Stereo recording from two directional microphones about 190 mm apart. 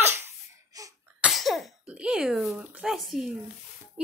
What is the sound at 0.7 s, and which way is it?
Sneeze, 20° right (ahead or behind).